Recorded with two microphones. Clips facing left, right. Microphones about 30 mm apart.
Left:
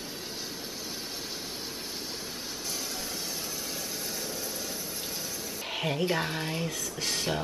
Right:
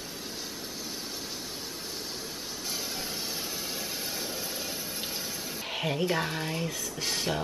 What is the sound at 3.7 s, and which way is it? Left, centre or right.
Vehicle, centre.